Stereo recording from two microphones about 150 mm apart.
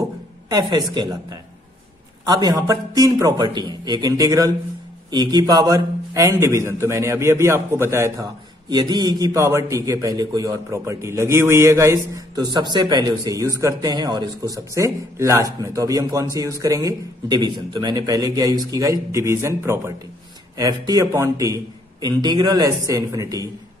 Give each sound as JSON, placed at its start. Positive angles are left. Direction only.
{"t": 0.5, "sound": "a man's voice", "side_deg": -25}